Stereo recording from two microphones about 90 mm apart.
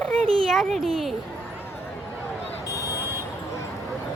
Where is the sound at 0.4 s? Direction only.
Centre (ahead or behind).